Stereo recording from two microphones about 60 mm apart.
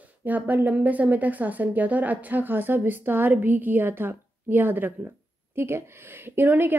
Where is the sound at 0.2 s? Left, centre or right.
Right.